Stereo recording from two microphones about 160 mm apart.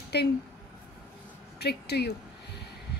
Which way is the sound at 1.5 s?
90° left.